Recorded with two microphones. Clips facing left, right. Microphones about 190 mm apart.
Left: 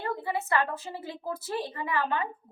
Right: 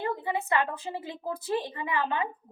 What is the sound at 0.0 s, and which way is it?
A woman's voice, 20° right (ahead or behind).